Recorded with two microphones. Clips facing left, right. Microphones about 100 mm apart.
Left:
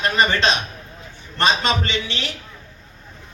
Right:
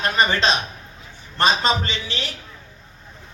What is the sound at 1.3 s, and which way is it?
Speech, 35° right (ahead or behind).